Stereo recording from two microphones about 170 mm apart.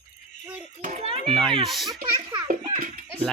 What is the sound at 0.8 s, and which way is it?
Speech, 50° right (ahead or behind).